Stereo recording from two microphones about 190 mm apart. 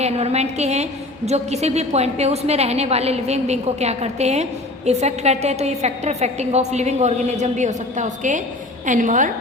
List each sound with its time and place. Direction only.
0.0 s a woman's voice: 35° right (ahead or behind)